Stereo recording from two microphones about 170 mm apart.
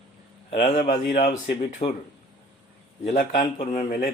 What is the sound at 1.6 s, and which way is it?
Speech, 35° left (ahead or behind).